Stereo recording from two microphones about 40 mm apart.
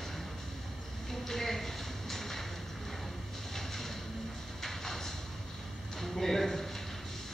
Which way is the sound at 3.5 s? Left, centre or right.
Centre.